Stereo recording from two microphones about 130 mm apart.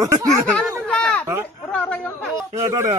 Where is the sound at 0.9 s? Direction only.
5° left (ahead or behind).